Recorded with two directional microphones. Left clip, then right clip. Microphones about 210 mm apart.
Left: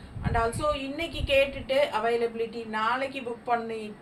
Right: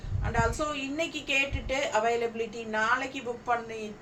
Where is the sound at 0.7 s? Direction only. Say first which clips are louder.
Left 2 dB; 15° right (ahead or behind).